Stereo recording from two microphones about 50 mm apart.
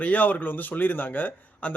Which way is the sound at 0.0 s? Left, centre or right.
Left.